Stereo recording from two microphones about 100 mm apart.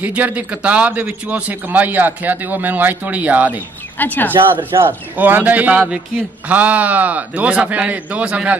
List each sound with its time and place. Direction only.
0.0 s a man's voice: 15° right (ahead or behind)
4.0 s speech: 20° left (ahead or behind)
4.6 s a man's voice: 20° right (ahead or behind)